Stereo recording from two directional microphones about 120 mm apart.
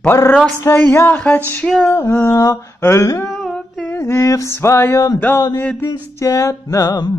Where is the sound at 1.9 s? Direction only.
20° left (ahead or behind).